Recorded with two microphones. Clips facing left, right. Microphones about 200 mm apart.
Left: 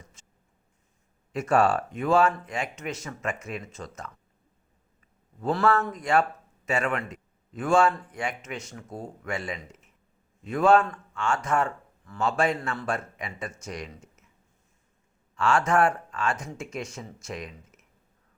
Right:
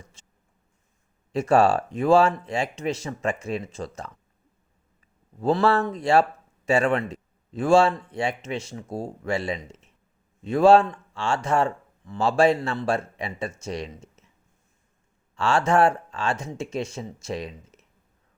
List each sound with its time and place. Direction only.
1.3 s speech: 30° right (ahead or behind)
5.4 s speech: 30° right (ahead or behind)
15.4 s speech: 30° right (ahead or behind)